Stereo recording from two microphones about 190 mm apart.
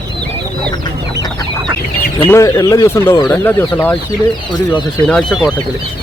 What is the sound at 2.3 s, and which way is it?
Speech, 15° left (ahead or behind).